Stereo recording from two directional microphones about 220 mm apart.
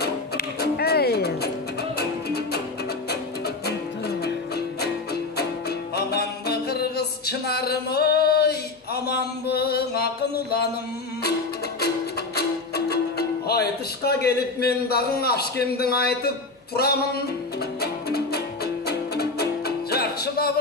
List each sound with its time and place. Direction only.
0.0 s music: 45° left (ahead or behind)
5.4 s music: 45° left (ahead or behind)
12.4 s music: 45° left (ahead or behind)
13.5 s a man's voice: 45° left (ahead or behind)
17.7 s music: 45° left (ahead or behind)